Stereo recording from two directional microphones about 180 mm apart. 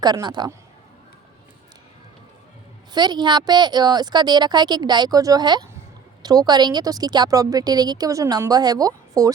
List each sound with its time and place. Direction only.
0.0 s speech: 25° right (ahead or behind)
2.9 s speech: 25° right (ahead or behind)